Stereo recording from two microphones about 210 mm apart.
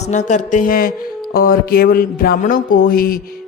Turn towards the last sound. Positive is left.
turn(degrees=45)  # may be behind; listen again after turning